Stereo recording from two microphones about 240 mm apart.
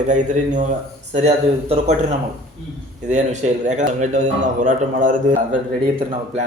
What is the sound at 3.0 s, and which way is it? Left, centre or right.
Speech, right.